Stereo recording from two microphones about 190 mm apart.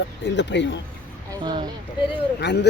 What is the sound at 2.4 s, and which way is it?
Speech, 65° left (ahead or behind).